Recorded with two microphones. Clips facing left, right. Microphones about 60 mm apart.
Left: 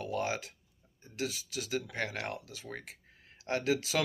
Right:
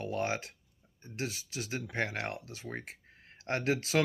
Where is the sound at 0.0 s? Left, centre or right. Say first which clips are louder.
Right 1 dB; right.